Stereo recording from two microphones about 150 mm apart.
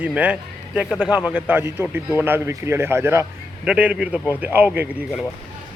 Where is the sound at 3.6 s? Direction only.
5° right (ahead or behind).